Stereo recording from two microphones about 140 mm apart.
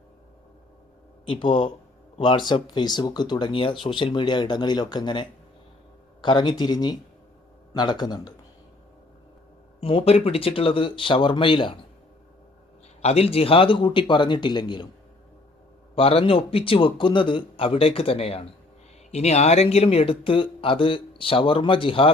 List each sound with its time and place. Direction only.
1.3 s a man's voice: 35° left (ahead or behind)
9.8 s speech: 40° left (ahead or behind)
13.0 s speech: 45° left (ahead or behind)
16.0 s speech: 45° left (ahead or behind)